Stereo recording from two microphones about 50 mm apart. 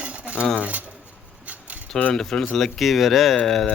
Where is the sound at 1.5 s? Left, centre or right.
Right.